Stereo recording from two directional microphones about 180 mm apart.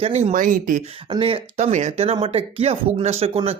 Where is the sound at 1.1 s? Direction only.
30° right (ahead or behind).